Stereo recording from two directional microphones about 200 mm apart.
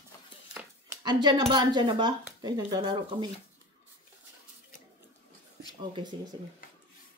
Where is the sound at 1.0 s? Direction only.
20° right (ahead or behind).